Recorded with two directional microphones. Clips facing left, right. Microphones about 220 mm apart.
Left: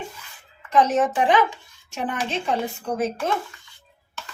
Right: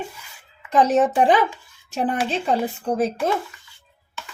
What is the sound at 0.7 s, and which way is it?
Speech, 35° right (ahead or behind).